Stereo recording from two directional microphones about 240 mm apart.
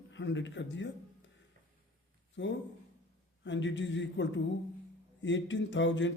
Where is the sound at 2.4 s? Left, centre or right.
Left.